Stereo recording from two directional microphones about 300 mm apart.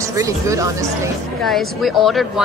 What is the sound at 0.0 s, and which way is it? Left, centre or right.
Speech, centre.